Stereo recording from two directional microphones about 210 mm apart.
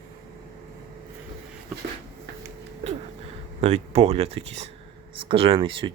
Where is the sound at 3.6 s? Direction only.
30° right (ahead or behind).